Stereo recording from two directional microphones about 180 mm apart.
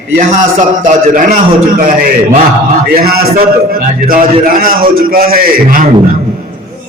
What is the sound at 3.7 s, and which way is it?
A man's voice, 50° right (ahead or behind).